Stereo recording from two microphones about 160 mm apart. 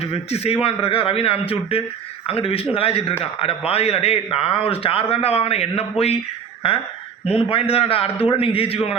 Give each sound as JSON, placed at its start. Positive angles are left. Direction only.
{"t": 0.0, "sound": "a man's voice", "side_deg": 40}
{"t": 7.3, "sound": "a man's voice", "side_deg": 35}